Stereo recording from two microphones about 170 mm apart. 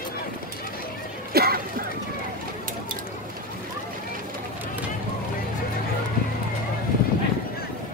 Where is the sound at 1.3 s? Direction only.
65° right (ahead or behind).